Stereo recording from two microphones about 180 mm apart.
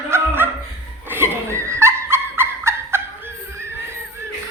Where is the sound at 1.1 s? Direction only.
15° right (ahead or behind).